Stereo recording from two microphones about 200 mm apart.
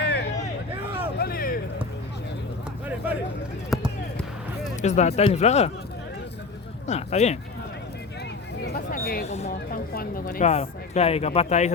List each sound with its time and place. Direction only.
0.0 s a sound: 55° left (ahead or behind)
1.1 s vehicle: 50° left (ahead or behind)
3.7 s run: centre (ahead or behind)
4.8 s speech: 35° left (ahead or behind)
6.8 s speech: 35° left (ahead or behind)
8.7 s hubbub: 50° left (ahead or behind)
9.2 s speech: 35° left (ahead or behind)
9.6 s speech: 50° left (ahead or behind)
10.5 s speech: 30° left (ahead or behind)